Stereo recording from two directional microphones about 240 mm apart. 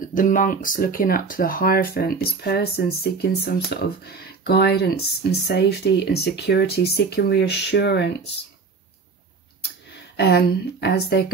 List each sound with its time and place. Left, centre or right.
0.1 s speech: left
10.1 s speech: left